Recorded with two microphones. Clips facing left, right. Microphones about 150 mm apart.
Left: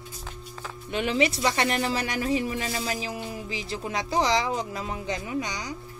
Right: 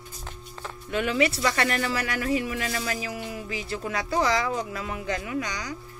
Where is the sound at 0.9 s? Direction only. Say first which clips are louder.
Even; 20° left (ahead or behind).